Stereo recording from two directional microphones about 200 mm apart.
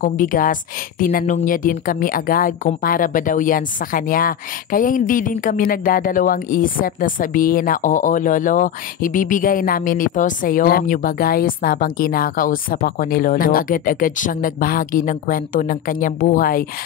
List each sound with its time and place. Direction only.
0.0 s a woman's voice: 45° left (ahead or behind)